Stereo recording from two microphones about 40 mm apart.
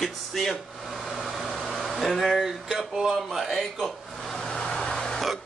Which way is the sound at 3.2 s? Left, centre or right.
Centre.